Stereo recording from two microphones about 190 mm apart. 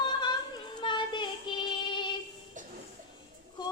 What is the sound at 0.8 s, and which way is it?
Child singing, 25° left (ahead or behind).